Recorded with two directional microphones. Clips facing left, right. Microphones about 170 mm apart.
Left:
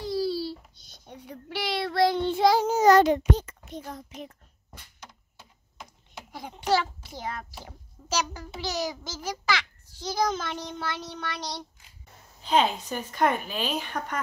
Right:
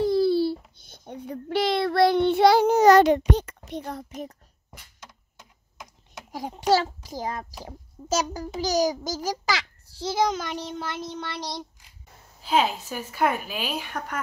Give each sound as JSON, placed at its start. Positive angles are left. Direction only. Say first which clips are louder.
{"t": 0.0, "sound": "a sound", "louder": "right 8 dB", "side_deg": -55}
{"t": 6.3, "sound": "a child's voice", "louder": "right 4 dB", "side_deg": -40}
{"t": 10.2, "sound": "child singing", "louder": "right 1 dB", "side_deg": -15}
{"t": 12.4, "sound": "speech", "louder": "even", "side_deg": -5}